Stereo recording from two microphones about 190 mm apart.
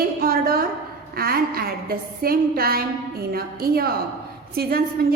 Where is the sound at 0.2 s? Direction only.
50° right (ahead or behind).